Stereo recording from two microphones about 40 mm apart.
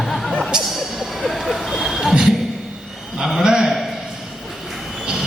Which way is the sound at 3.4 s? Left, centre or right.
Centre.